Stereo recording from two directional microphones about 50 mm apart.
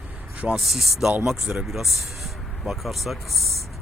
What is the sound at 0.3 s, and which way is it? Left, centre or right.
Speech, right.